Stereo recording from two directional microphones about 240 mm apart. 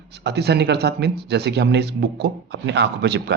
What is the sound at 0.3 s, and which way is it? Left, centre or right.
Speech, right.